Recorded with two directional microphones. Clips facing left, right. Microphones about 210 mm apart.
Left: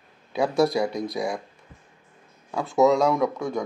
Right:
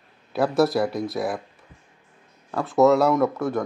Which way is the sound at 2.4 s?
Centre (ahead or behind).